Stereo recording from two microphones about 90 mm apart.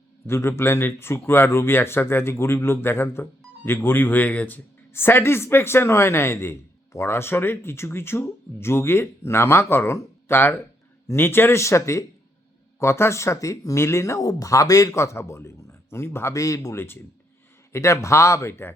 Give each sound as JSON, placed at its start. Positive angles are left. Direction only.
{"t": 0.3, "sound": "speech", "side_deg": 30}